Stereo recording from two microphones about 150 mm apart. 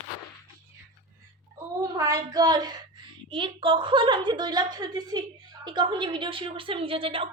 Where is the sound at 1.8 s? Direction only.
20° right (ahead or behind).